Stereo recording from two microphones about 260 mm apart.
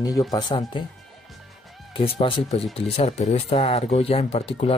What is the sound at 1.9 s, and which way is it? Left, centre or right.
Speech, left.